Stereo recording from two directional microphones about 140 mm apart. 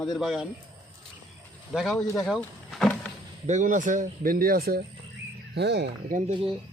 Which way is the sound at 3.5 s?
60° right (ahead or behind).